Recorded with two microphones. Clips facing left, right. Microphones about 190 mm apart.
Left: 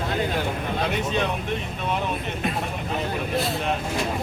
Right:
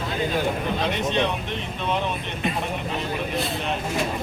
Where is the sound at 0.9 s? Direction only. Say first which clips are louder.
Right 1 dB; 10° left (ahead or behind).